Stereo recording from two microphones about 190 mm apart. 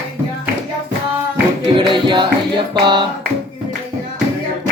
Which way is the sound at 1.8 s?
25° right (ahead or behind).